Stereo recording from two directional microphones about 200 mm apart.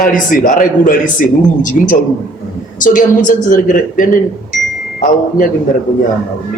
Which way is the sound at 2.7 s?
40° left (ahead or behind).